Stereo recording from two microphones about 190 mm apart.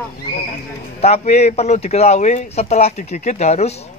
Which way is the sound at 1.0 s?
35° left (ahead or behind).